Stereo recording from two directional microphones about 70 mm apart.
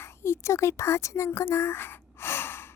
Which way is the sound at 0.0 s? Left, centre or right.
Left.